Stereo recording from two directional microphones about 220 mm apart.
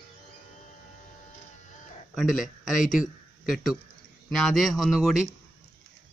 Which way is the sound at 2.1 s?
5° right (ahead or behind).